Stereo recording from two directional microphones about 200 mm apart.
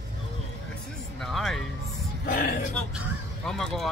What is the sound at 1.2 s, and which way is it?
Music, centre (ahead or behind).